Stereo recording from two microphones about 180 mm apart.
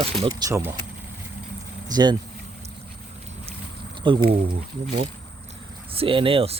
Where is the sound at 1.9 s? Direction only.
25° right (ahead or behind).